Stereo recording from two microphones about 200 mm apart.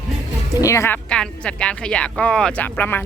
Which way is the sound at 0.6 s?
15° left (ahead or behind).